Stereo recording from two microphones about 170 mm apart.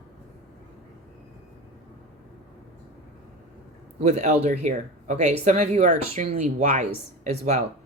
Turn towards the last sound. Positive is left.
turn(degrees=-40)  # may be behind; listen again after turning